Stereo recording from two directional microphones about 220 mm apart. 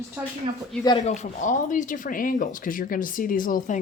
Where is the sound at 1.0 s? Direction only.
30° left (ahead or behind).